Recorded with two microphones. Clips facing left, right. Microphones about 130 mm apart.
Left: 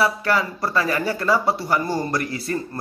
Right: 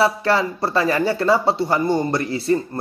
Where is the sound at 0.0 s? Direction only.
30° right (ahead or behind).